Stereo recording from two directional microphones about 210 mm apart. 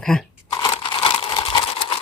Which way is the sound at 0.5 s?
20° left (ahead or behind).